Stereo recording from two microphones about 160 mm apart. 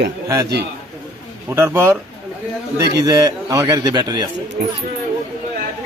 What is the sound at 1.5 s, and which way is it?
Speech, 15° right (ahead or behind).